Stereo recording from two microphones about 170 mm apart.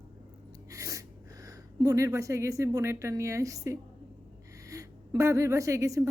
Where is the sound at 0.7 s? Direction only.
20° right (ahead or behind).